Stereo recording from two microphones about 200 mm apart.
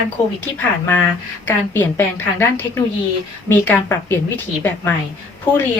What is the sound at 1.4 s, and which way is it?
A woman's voice, 10° left (ahead or behind).